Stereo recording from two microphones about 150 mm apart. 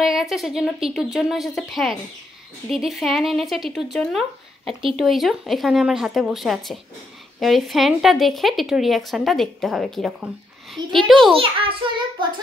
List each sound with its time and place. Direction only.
0.0 s a woman's voice: centre (ahead or behind)
11.3 s a child's voice: 35° right (ahead or behind)